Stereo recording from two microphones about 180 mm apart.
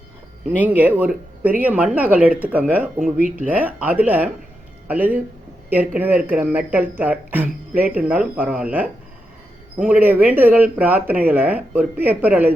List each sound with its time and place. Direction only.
0.5 s speech: 10° right (ahead or behind)
3.0 s speech: 50° right (ahead or behind)
3.3 s speech: 10° right (ahead or behind)